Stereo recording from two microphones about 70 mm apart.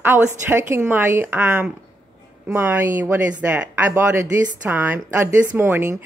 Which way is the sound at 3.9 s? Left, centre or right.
Right.